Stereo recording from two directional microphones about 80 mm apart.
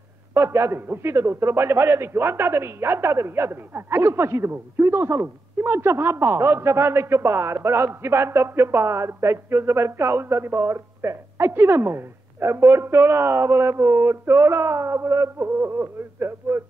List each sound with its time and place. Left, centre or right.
0.3 s a man's voice: right